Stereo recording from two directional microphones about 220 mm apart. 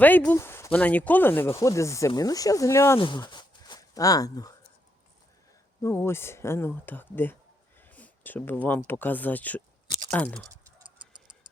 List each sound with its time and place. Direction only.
0.0 s speech: 10° left (ahead or behind)
5.8 s speech: 10° left (ahead or behind)
7.8 s a sound: 10° left (ahead or behind)
8.9 s speech: 10° left (ahead or behind)
10.5 s tick-tock: 20° right (ahead or behind)